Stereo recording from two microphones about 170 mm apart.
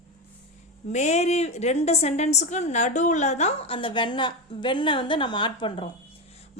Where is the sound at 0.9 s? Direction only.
40° left (ahead or behind).